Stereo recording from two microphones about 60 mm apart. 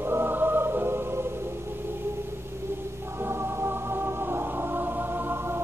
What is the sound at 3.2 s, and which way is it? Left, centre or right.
Music, right.